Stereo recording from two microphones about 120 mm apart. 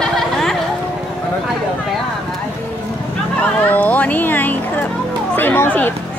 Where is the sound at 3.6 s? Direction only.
15° left (ahead or behind).